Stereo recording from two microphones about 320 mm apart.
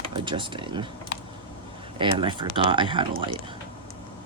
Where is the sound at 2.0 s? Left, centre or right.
Centre.